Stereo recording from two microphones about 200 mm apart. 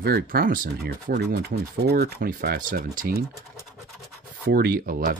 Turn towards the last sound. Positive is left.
turn(degrees=-45)  # may be behind; listen again after turning